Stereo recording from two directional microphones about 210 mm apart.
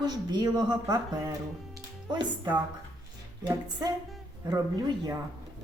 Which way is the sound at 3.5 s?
20° right (ahead or behind).